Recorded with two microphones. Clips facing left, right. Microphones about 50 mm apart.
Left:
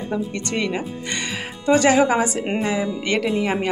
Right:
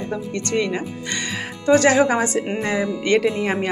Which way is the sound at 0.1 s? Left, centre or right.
Centre.